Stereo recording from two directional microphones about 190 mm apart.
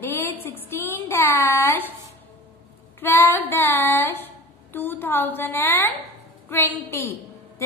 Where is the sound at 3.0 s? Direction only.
10° left (ahead or behind).